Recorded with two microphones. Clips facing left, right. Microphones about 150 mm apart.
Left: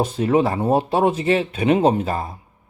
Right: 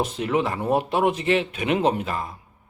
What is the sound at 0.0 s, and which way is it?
Speech, 30° left (ahead or behind).